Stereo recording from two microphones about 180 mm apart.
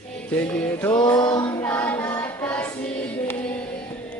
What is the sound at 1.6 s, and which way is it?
Music, 10° left (ahead or behind).